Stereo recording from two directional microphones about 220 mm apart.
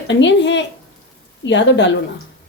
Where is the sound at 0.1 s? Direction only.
55° left (ahead or behind).